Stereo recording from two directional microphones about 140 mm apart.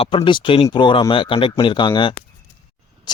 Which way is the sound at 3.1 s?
30° left (ahead or behind).